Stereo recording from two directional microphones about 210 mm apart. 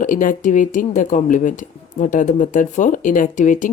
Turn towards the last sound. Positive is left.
turn(degrees=35)  # may be behind; listen again after turning